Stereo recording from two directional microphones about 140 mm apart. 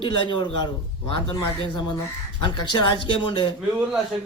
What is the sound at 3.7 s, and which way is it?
Speech, 10° right (ahead or behind).